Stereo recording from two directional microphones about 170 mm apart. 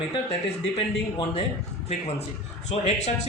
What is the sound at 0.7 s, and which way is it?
Speech, 35° left (ahead or behind).